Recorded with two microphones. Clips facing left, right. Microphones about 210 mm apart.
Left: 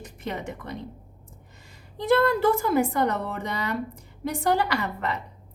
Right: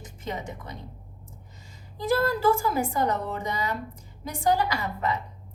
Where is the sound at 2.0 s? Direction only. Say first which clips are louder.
Left 3 dB; 65° left (ahead or behind).